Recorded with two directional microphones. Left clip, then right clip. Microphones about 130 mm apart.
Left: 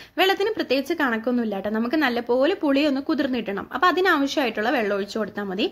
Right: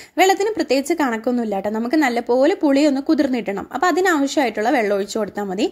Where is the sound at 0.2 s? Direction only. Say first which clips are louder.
Right 5 dB; 50° right (ahead or behind).